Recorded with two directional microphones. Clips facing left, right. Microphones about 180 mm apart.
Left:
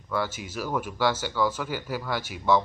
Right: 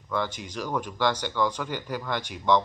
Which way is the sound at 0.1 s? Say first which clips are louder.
Even; 5° left (ahead or behind).